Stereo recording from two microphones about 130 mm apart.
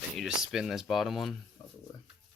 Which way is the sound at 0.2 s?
5° right (ahead or behind).